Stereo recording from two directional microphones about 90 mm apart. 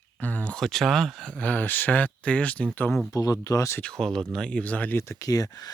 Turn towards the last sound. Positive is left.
turn(degrees=45)  # may be behind; listen again after turning